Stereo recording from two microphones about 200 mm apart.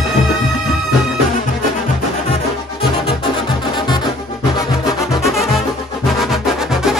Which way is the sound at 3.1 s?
25° left (ahead or behind).